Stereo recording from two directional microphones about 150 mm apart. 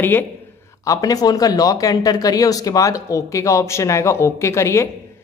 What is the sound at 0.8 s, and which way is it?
Speech, 25° left (ahead or behind).